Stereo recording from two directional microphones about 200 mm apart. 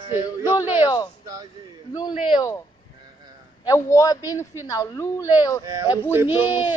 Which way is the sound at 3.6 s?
15° left (ahead or behind).